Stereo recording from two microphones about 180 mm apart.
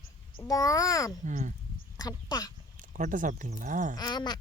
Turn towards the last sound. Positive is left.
turn(degrees=25)  # may be behind; listen again after turning